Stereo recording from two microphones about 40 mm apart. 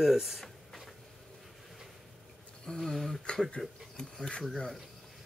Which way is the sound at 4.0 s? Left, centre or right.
Left.